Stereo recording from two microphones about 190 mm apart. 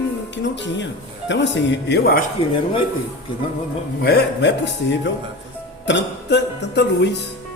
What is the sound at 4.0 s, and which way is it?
Speech, 60° left (ahead or behind).